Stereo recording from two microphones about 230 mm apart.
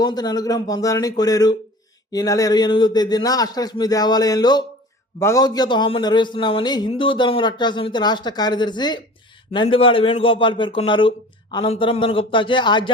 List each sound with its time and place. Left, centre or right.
0.0 s a man's voice: centre